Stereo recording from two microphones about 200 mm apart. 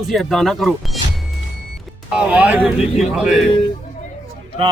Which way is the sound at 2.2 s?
10° right (ahead or behind).